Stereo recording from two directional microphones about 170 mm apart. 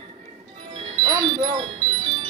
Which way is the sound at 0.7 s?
30° right (ahead or behind).